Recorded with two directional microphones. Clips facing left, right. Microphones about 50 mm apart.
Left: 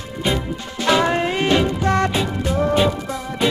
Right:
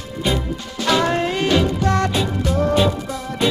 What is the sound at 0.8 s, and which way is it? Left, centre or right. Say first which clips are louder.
Music: left 1 dB; left.